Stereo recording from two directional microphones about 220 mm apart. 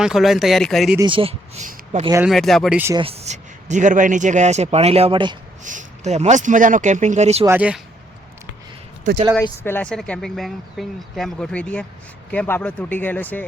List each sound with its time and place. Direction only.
0.0 s speech: centre (ahead or behind)
0.9 s speech: 20° right (ahead or behind)
2.2 s speech: centre (ahead or behind)
3.0 s speech: 25° right (ahead or behind)
5.6 s speech: 35° right (ahead or behind)
7.4 s speech: 5° right (ahead or behind)
9.3 s speech: 10° left (ahead or behind)